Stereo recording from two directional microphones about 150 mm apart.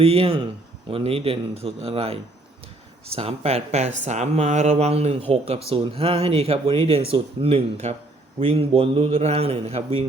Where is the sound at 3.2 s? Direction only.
40° right (ahead or behind).